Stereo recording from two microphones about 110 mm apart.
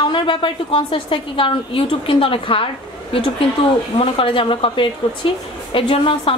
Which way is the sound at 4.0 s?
55° left (ahead or behind).